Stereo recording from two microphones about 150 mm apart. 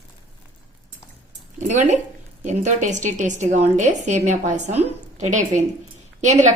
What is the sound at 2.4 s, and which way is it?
A woman's voice, 55° right (ahead or behind).